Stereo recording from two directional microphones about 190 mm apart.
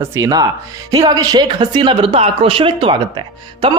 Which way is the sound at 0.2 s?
20° right (ahead or behind).